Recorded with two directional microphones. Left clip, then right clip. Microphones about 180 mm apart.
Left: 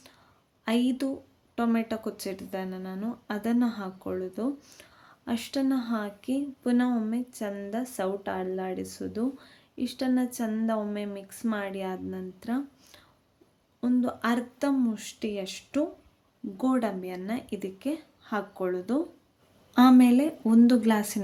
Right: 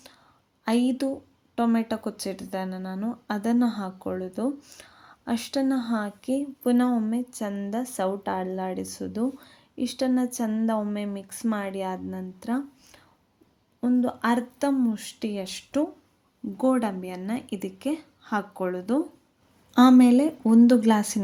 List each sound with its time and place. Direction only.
0.6 s speech: 15° right (ahead or behind)